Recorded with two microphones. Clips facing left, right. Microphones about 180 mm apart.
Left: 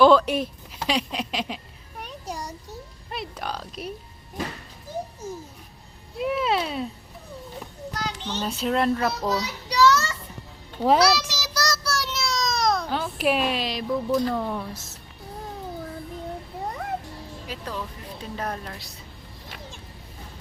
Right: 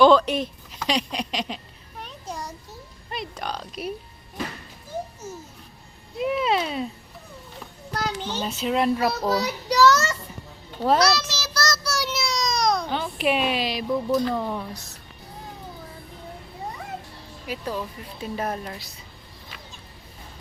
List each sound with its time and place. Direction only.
0.0 s speech: 5° left (ahead or behind)
0.9 s a sound: 5° left (ahead or behind)
3.1 s a child's voice: 5° left (ahead or behind)
6.1 s a child's voice: centre (ahead or behind)
8.2 s a child's voice: 5° right (ahead or behind)
9.3 s child singing: 45° right (ahead or behind)
10.8 s a sound: 10° left (ahead or behind)
11.8 s a sound: centre (ahead or behind)
17.5 s speech: 10° right (ahead or behind)